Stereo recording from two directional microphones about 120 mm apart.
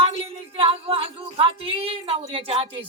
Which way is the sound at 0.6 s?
50° right (ahead or behind).